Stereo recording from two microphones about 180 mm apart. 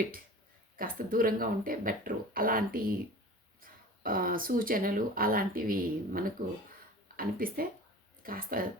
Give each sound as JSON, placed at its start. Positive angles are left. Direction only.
{"t": 0.8, "sound": "speech", "side_deg": -50}